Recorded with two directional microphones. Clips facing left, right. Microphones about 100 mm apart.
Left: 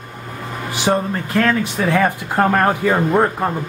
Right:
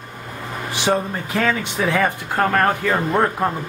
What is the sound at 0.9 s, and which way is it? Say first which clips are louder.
Speech: left 2 dB; 5° left (ahead or behind).